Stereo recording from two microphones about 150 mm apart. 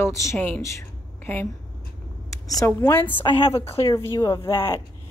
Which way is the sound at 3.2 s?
40° left (ahead or behind).